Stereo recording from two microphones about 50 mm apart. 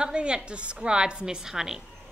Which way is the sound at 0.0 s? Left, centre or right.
Centre.